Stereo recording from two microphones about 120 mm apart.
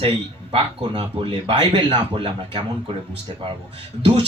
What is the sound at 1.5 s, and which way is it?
Speech, 40° right (ahead or behind).